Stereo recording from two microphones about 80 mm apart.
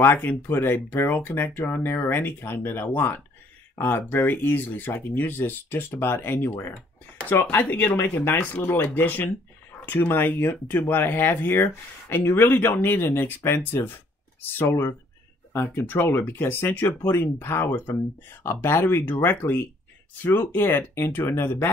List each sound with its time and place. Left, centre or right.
0.0 s speech: left
6.7 s speech: centre